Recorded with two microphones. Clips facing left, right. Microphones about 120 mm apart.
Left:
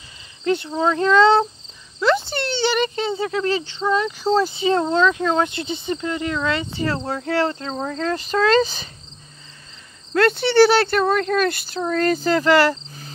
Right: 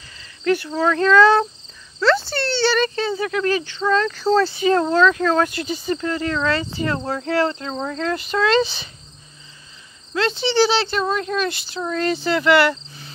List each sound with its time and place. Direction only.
0.4 s speech: 20° left (ahead or behind); by 8.8 s 40° left (ahead or behind)
10.1 s speech: 55° left (ahead or behind); by 13.1 s 35° left (ahead or behind)